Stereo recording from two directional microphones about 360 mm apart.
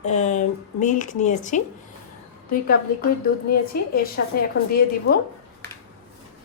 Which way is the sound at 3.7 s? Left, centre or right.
Left.